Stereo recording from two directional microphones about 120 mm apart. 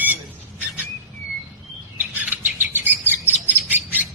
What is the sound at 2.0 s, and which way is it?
Bird, 15° right (ahead or behind).